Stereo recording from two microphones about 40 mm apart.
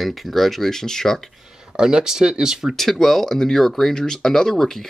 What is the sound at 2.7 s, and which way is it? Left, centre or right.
Speech, centre.